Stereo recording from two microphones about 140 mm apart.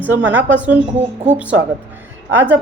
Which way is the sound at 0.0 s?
10° right (ahead or behind).